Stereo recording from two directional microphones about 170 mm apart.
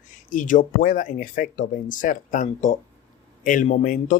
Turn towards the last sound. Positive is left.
turn(degrees=50)  # may be behind; listen again after turning